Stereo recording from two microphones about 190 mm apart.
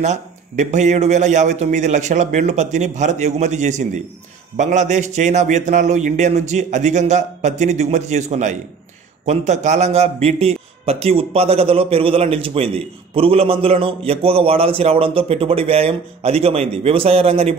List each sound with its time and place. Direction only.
0.0 s a man's voice: 40° right (ahead or behind)